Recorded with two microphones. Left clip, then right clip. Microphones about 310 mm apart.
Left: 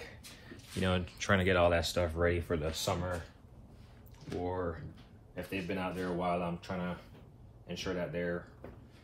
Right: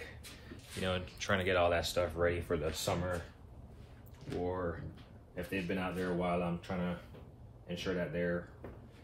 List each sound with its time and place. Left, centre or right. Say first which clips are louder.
0.5 s speech: left 3 dB; left
4.4 s speech: left 1 dB; centre